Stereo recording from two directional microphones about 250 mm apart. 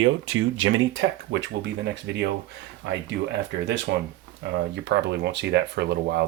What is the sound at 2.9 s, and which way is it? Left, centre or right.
Speech, right.